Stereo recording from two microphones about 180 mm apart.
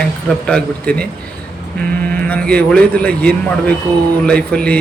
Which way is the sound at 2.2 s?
5° left (ahead or behind).